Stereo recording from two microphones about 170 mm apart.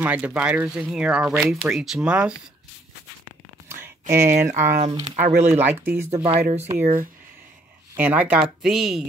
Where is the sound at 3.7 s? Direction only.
15° right (ahead or behind).